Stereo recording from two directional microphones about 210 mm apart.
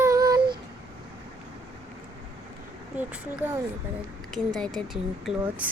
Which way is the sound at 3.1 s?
5° right (ahead or behind).